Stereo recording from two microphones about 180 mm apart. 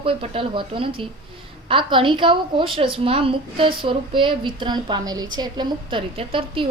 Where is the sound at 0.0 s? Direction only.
30° right (ahead or behind).